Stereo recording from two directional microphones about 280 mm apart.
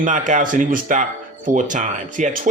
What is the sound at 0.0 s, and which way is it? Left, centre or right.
Speech, right.